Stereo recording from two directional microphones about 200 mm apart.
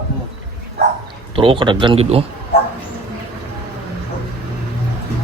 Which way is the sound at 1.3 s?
25° right (ahead or behind).